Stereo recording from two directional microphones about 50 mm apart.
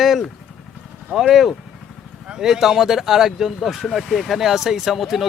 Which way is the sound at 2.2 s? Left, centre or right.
Centre.